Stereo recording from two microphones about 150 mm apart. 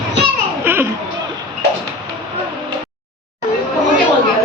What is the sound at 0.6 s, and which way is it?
Children playing, 15° right (ahead or behind).